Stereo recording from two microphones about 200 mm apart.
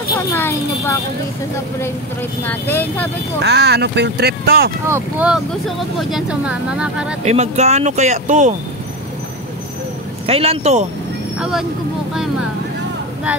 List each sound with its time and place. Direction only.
0.3 s a sound: 10° left (ahead or behind)
2.4 s speech: 10° left (ahead or behind)
3.4 s speech: 55° right (ahead or behind)
4.8 s speech: 10° right (ahead or behind)
7.2 s speech: 35° right (ahead or behind)
10.2 s speech: 30° right (ahead or behind)
11.3 s speech: 5° right (ahead or behind)